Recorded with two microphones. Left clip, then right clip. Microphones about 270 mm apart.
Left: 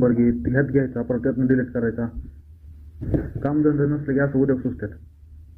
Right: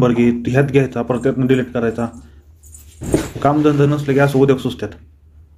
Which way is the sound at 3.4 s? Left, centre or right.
Right.